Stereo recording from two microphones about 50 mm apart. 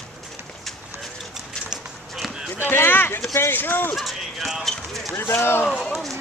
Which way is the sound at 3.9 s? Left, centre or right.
Centre.